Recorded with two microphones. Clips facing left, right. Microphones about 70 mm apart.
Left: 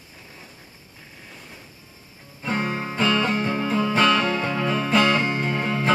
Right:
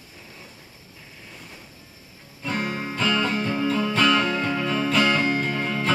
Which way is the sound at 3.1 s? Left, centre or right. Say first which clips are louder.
Even; left.